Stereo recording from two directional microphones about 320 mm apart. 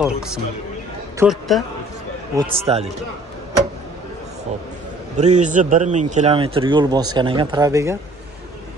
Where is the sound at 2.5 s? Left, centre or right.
Centre.